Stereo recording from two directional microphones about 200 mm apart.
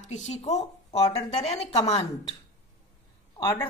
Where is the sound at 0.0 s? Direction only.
35° left (ahead or behind).